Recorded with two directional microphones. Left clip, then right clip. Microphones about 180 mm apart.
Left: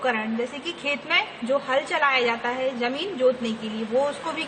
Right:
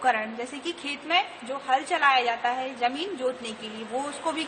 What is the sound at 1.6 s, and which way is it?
A woman's voice, 20° right (ahead or behind).